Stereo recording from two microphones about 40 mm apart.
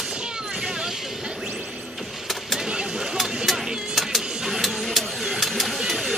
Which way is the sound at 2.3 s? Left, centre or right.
Centre.